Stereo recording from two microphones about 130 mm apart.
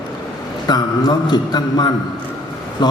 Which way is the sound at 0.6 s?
30° left (ahead or behind).